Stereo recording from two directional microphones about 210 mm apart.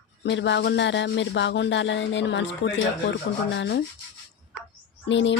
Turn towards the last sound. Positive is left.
turn(degrees=60)  # may be behind; listen again after turning